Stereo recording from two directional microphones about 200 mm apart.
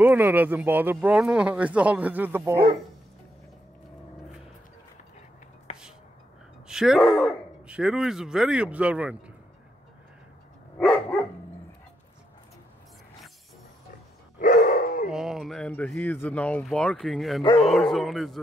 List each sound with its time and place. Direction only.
0.0 s speech: 10° right (ahead or behind)
5.7 s finger snapping: 35° left (ahead or behind)
6.7 s speech: centre (ahead or behind)
10.8 s dog: 10° left (ahead or behind)
14.4 s dog: 45° left (ahead or behind)
15.0 s speech: centre (ahead or behind)